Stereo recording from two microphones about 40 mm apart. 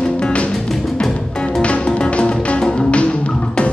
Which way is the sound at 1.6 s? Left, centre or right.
Left.